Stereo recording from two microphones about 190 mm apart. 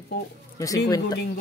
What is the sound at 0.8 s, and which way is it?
Speech, 20° left (ahead or behind).